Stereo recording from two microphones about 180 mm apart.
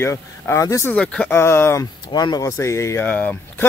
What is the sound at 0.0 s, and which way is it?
Speech, 15° left (ahead or behind).